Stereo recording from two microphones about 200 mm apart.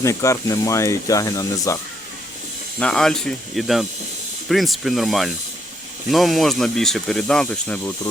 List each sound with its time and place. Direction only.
0.0 s speech: 15° left (ahead or behind)
2.7 s speech: 5° left (ahead or behind)